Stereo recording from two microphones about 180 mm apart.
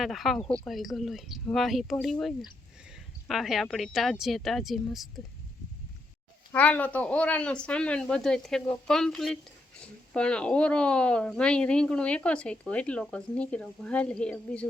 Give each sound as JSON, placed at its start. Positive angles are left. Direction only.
{"t": 0.0, "sound": "a woman's voice", "side_deg": 0}
{"t": 6.5, "sound": "a woman's voice", "side_deg": 10}